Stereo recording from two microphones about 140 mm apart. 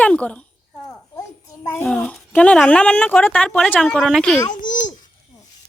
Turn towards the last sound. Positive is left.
turn(degrees=65)  # may be behind; listen again after turning